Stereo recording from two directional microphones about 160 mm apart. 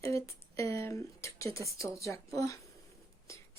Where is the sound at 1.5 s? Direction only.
20° left (ahead or behind).